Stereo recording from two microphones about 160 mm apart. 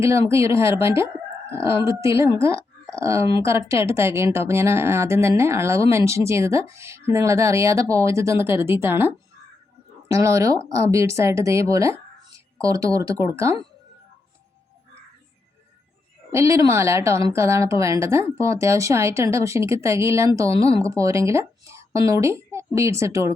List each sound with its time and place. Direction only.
0.0 s a woman's voice: 20° right (ahead or behind)
16.3 s a woman's voice: 20° right (ahead or behind)